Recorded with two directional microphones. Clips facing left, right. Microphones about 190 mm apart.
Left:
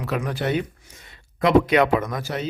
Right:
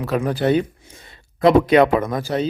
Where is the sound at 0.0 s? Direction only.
35° right (ahead or behind).